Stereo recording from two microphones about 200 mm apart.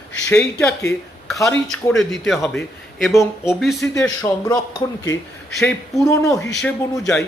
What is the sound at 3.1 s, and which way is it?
Speech, 15° left (ahead or behind).